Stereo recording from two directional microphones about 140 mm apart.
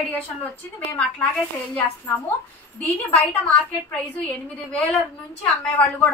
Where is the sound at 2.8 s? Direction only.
10° left (ahead or behind).